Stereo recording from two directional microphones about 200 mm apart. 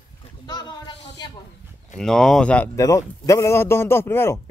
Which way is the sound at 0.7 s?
20° left (ahead or behind).